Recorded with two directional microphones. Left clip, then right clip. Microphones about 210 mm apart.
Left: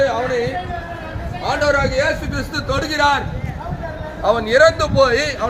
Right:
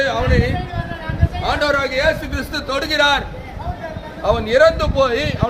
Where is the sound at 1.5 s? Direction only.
50° right (ahead or behind).